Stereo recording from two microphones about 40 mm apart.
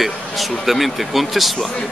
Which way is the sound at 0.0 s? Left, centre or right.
Centre.